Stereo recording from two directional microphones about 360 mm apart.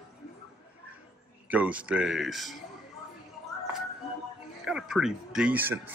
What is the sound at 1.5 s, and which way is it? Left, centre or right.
Speech, centre.